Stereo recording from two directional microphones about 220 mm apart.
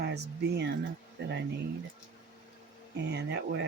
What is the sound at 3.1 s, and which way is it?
Speech, 50° right (ahead or behind).